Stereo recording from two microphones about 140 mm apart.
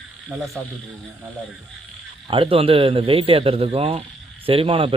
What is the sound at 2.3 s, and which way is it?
Speech, 40° right (ahead or behind).